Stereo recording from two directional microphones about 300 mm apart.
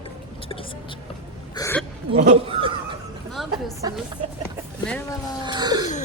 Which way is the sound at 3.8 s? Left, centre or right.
Centre.